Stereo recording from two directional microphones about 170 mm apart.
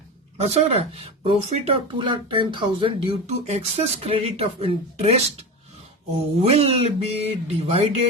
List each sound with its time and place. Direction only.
0.3 s speech: 40° right (ahead or behind)